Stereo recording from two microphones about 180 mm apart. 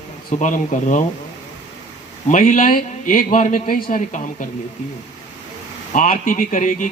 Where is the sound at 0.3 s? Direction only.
45° left (ahead or behind).